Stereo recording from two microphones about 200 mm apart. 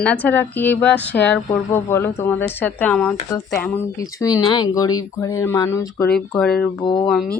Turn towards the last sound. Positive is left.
turn(degrees=0)  # may be behind; listen again after turning